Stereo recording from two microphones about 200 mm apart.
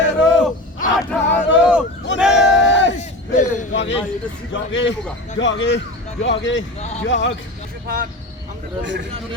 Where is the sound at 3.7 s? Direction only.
65° left (ahead or behind).